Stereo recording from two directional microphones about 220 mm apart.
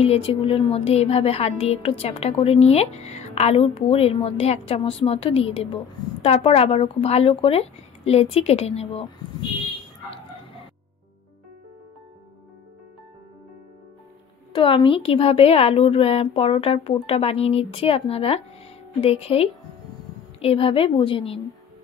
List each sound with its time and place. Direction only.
0.0 s a woman's voice: 25° left (ahead or behind)
14.5 s a woman's voice: 25° left (ahead or behind)